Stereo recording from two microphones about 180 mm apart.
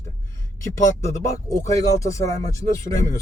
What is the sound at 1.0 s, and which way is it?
Speech, 15° left (ahead or behind).